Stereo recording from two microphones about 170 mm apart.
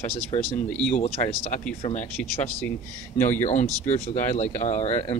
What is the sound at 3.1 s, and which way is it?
Speech, 15° left (ahead or behind).